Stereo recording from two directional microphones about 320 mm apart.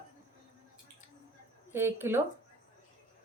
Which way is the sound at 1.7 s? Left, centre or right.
Centre.